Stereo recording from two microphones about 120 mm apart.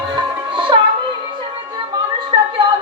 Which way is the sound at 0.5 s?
40° right (ahead or behind).